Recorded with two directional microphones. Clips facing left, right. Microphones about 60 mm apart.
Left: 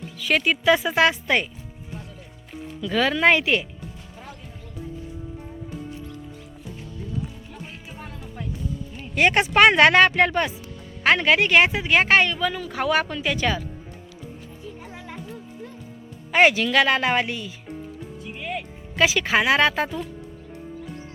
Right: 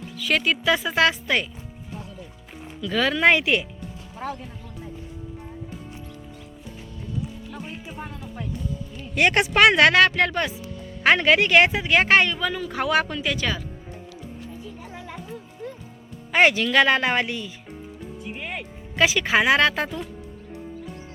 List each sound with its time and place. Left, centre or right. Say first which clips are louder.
0.2 s speech: left 1 dB; centre
2.8 s speech: even; centre
4.2 s speech: right 12 dB; right
7.9 s music: right 2 dB; centre
9.1 s speech: left 1 dB; centre
9.7 s speech: left 1 dB; centre
11.0 s speech: right 1 dB; centre
16.3 s speech: left 1 dB; centre
18.3 s music: left 4 dB; right
19.2 s speech: right 2 dB; centre